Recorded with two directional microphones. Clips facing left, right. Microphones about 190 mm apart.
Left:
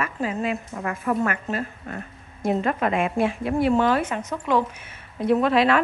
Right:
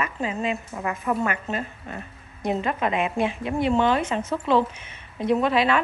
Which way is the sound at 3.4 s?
5° left (ahead or behind).